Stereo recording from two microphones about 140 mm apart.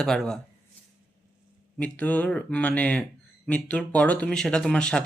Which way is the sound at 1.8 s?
10° left (ahead or behind).